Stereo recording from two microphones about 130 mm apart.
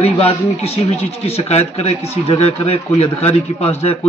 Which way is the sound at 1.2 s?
50° left (ahead or behind).